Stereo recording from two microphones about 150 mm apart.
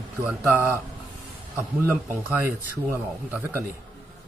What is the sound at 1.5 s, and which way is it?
Speech, 15° right (ahead or behind).